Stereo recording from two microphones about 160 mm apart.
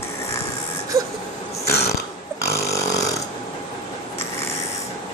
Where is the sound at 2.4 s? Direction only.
20° left (ahead or behind).